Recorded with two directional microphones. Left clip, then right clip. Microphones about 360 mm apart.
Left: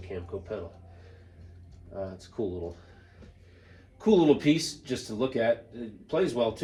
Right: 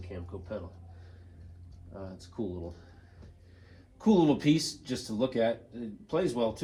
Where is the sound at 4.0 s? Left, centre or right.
Centre.